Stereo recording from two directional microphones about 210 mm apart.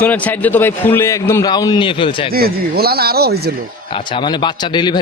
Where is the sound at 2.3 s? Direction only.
45° right (ahead or behind).